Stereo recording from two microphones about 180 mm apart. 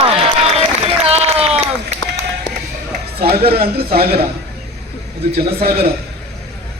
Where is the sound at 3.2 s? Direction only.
60° right (ahead or behind).